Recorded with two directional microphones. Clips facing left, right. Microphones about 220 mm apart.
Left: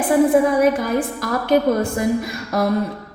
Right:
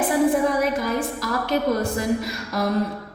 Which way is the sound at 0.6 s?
55° left (ahead or behind).